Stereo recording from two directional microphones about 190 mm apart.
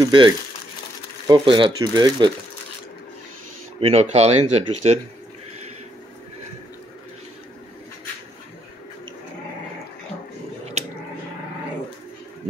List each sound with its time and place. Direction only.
0.0 s speech: 25° right (ahead or behind)
3.8 s speech: 35° right (ahead or behind)
10.8 s a sound: 35° right (ahead or behind)